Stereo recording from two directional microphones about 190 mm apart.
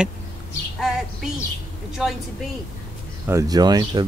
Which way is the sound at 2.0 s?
Centre (ahead or behind).